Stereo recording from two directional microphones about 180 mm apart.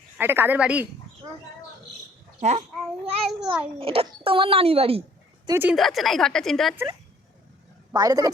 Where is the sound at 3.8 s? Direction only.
30° right (ahead or behind).